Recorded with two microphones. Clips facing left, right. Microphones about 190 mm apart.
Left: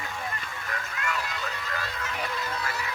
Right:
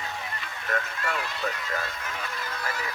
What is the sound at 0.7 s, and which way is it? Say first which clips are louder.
Vehicle: right 4 dB; 45° right (ahead or behind).